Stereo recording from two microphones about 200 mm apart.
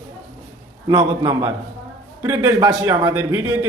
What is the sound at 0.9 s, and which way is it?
Speech, 20° right (ahead or behind).